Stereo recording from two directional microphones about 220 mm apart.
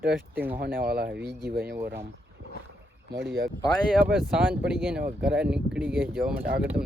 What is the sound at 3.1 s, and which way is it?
Speech, 50° right (ahead or behind).